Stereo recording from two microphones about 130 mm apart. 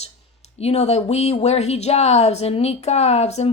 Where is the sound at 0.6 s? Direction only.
55° left (ahead or behind).